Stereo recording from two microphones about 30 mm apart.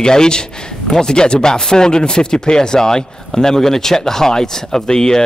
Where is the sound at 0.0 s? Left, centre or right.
Left.